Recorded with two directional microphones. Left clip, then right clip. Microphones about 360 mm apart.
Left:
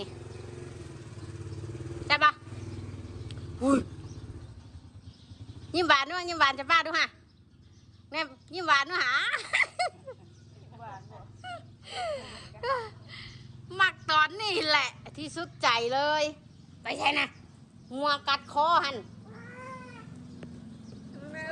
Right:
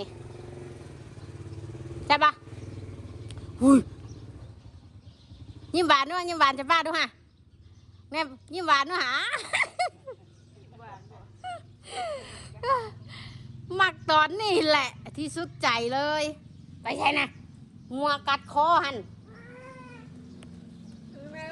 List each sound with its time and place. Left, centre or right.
2.0 s vehicle: centre
5.7 s a woman's voice: centre
8.1 s speech: centre
11.5 s a sound: centre
16.8 s a woman's voice: centre